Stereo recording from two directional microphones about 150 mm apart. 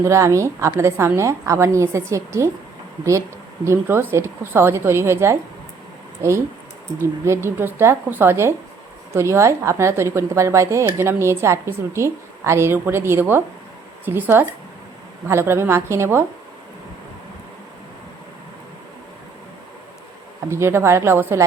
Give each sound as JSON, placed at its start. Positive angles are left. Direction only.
{"t": 0.0, "sound": "a woman's voice", "side_deg": -20}
{"t": 7.0, "sound": "speech", "side_deg": -15}
{"t": 20.5, "sound": "speech", "side_deg": -15}